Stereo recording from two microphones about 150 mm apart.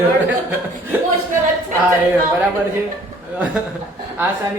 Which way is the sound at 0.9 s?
10° right (ahead or behind).